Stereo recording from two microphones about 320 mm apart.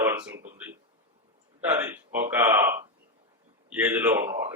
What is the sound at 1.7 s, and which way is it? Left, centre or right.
A man's voice, centre.